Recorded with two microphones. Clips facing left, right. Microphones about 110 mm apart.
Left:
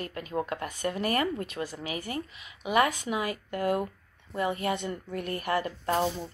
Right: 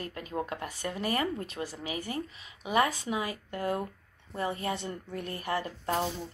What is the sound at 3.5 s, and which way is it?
Speech, 70° left (ahead or behind).